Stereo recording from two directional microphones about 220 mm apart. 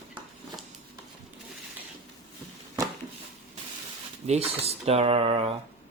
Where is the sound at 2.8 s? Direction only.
15° right (ahead or behind).